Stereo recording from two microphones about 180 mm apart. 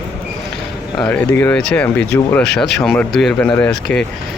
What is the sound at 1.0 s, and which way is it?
Speech, 10° left (ahead or behind).